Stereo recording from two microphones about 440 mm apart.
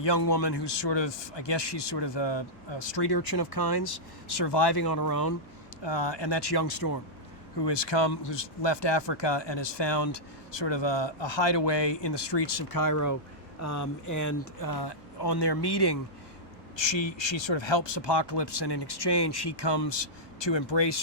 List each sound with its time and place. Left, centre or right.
0.0 s a man's voice: left
5.8 s a man's voice: left
7.6 s speech: left
16.7 s a man's voice: left